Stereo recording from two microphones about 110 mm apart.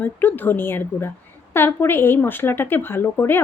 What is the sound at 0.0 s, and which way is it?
Speech, 15° left (ahead or behind).